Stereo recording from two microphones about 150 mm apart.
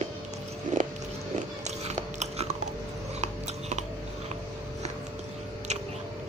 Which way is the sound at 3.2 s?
50° right (ahead or behind).